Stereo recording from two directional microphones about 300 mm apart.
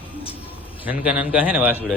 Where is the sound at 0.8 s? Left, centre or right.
Centre.